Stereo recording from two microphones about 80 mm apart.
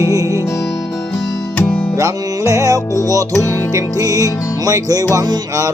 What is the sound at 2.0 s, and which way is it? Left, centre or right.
Music, right.